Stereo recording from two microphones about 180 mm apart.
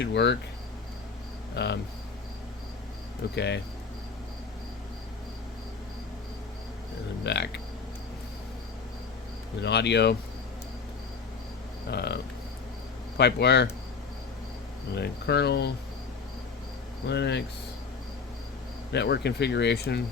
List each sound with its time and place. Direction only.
0.0 s speech: 75° left (ahead or behind)
1.5 s speech: 70° left (ahead or behind)
3.3 s speech: 70° left (ahead or behind)
7.3 s speech: 70° left (ahead or behind)
9.6 s speech: 70° left (ahead or behind)
11.9 s speech: 65° left (ahead or behind)
14.9 s speech: 65° left (ahead or behind)
17.1 s speech: 70° left (ahead or behind)
18.9 s speech: 70° left (ahead or behind)